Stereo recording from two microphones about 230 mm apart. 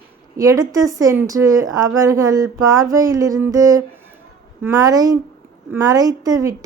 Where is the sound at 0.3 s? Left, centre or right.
Centre.